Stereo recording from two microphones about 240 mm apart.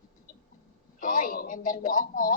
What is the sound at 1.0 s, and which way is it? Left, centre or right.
A man's voice, left.